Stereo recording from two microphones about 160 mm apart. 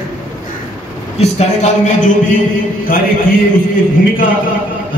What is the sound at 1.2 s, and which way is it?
Speech, 45° left (ahead or behind).